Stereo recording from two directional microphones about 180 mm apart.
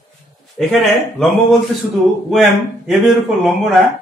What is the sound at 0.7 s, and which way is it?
Speech, centre (ahead or behind).